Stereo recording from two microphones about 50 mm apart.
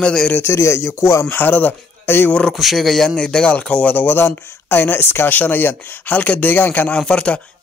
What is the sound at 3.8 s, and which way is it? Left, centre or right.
Speech, left.